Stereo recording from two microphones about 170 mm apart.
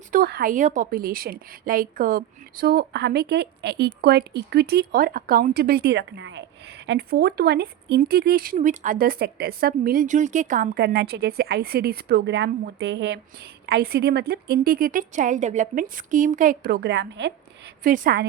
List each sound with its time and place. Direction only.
0.1 s a woman's voice: 60° right (ahead or behind); by 6.4 s 90° right
6.8 s speech: 70° right (ahead or behind)
8.5 s speech: 50° right (ahead or behind)
10.8 s speech: 70° right (ahead or behind); by 13.1 s 90° right
13.7 s a woman's voice: 70° right (ahead or behind); by 17.3 s 90° right
17.8 s a woman's voice: 55° right (ahead or behind)